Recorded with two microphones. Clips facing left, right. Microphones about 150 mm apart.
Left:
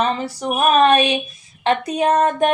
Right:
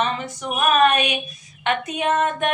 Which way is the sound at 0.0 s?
35° left (ahead or behind).